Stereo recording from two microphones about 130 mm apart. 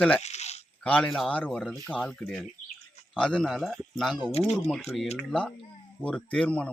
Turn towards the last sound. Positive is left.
turn(degrees=10)  # may be behind; listen again after turning